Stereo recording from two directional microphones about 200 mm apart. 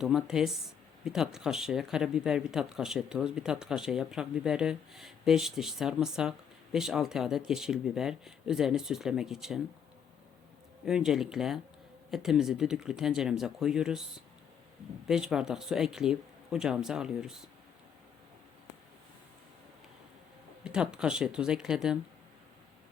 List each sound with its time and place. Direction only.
0.0 s speech: 5° right (ahead or behind)
10.8 s speech: 5° right (ahead or behind)
15.0 s speech: 5° right (ahead or behind)
20.7 s speech: 5° right (ahead or behind)